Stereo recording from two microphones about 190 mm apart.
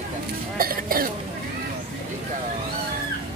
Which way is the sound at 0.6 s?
50° right (ahead or behind).